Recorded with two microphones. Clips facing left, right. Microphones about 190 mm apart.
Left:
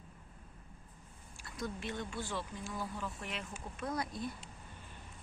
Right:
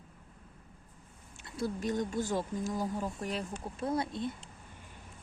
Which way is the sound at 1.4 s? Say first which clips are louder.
Right 6 dB; 25° right (ahead or behind).